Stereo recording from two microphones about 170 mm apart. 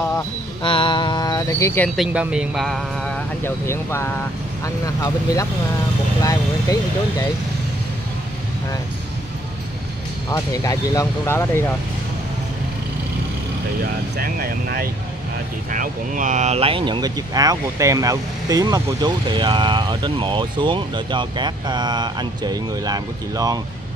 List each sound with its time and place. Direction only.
0.6 s speech: 30° left (ahead or behind)
2.0 s speech: 5° right (ahead or behind)
3.4 s speech: 15° left (ahead or behind)
10.3 s speech: 20° left (ahead or behind)
14.1 s speech: 65° right (ahead or behind)
15.7 s speech: 50° right (ahead or behind); by 23.6 s 20° right (ahead or behind)